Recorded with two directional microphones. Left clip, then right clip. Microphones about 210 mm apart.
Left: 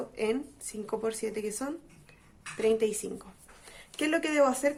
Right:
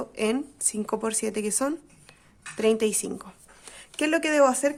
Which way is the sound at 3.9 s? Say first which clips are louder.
Right 5 dB; 25° right (ahead or behind).